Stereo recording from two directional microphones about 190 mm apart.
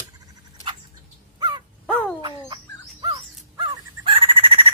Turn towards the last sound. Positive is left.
turn(degrees=-30)  # may be behind; listen again after turning